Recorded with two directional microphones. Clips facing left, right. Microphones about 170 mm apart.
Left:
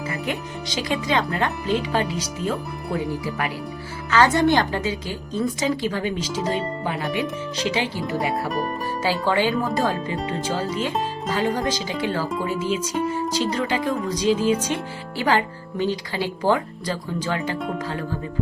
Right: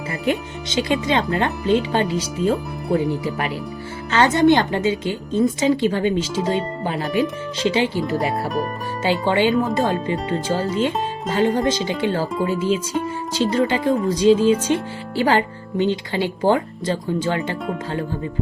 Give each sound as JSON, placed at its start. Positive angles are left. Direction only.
{"t": 0.1, "sound": "speech", "side_deg": -30}
{"t": 9.0, "sound": "speech", "side_deg": -25}
{"t": 10.2, "sound": "speech", "side_deg": 0}
{"t": 10.8, "sound": "speech", "side_deg": -25}